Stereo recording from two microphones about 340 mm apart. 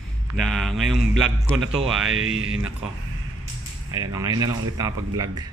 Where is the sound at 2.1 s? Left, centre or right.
Right.